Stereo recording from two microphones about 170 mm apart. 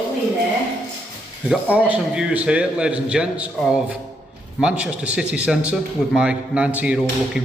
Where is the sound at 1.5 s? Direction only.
5° right (ahead or behind).